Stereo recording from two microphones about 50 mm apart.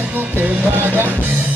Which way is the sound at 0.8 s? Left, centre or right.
Right.